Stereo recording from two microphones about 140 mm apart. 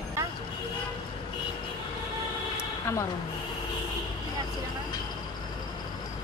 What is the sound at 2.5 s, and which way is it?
Vehicle, 20° left (ahead or behind).